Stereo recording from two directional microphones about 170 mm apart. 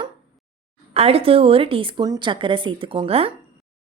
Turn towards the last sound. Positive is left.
turn(degrees=-35)  # may be behind; listen again after turning